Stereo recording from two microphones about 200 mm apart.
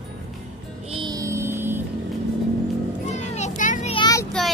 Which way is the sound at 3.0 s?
35° left (ahead or behind).